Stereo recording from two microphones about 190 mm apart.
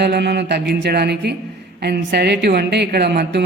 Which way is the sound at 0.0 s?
60° right (ahead or behind).